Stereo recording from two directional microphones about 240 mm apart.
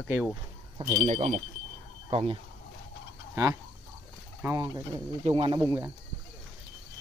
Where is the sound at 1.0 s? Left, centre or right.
Right.